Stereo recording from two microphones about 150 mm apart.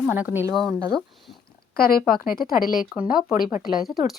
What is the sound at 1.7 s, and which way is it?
Speech, 80° left.